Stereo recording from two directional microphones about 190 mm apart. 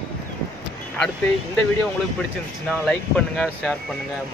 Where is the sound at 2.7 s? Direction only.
5° left (ahead or behind).